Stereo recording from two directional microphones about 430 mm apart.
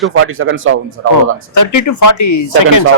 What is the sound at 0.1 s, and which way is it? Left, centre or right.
Speech, right.